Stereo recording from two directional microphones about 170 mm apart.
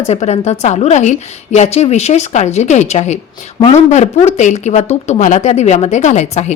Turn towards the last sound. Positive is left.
turn(degrees=40)  # may be behind; listen again after turning